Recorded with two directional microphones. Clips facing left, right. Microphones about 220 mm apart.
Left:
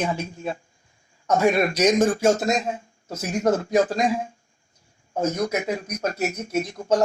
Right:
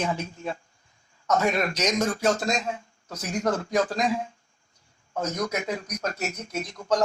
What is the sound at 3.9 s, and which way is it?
Speech, 45° left (ahead or behind).